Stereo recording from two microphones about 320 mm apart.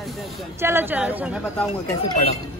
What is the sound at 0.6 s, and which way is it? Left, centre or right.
A woman's voice, centre.